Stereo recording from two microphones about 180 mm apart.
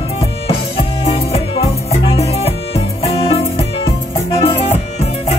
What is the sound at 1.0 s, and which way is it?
Music, 30° left (ahead or behind).